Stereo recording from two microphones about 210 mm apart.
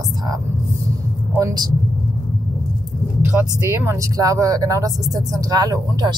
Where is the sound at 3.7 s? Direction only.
10° right (ahead or behind).